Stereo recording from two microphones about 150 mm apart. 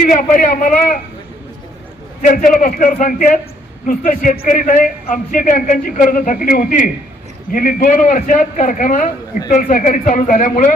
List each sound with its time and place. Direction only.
0.0 s a man's voice: 65° left (ahead or behind)
2.2 s a man's voice: 65° left (ahead or behind)